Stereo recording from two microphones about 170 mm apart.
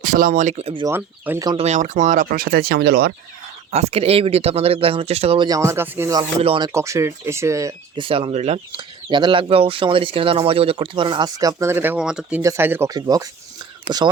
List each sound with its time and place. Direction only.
0.0 s speech: 55° right (ahead or behind); by 0.9 s 35° right (ahead or behind)
0.9 s speech: 10° right (ahead or behind)
1.5 s speech: 35° right (ahead or behind); by 3.1 s 70° right (ahead or behind)
3.7 s speech: 40° right (ahead or behind)
5.5 s speech: 15° right (ahead or behind)
6.4 s speech: 30° right (ahead or behind)
6.7 s speech: 15° right (ahead or behind)
7.9 s speech: 30° right (ahead or behind); by 12.4 s 5° right (ahead or behind)
12.4 s speech: 15° right (ahead or behind)